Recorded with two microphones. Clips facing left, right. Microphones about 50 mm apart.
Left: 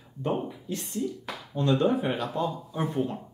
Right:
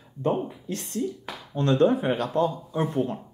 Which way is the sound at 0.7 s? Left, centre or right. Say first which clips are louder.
Right 1 dB; right.